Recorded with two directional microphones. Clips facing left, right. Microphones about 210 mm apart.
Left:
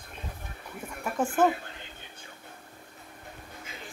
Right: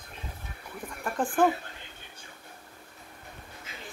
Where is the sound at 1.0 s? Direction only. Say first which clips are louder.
Even; 5° left (ahead or behind).